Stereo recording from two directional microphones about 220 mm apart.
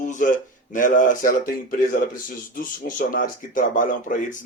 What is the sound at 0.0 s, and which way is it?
Speech, 35° left (ahead or behind).